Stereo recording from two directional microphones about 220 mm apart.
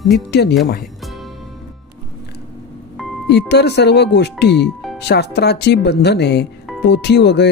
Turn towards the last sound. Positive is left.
turn(degrees=50)  # may be behind; listen again after turning